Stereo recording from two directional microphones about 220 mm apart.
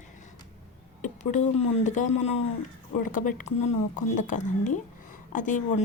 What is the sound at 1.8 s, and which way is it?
A woman's voice, 35° left (ahead or behind).